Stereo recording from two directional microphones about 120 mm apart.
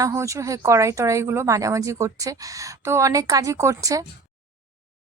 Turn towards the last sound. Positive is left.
turn(degrees=-30)  # may be behind; listen again after turning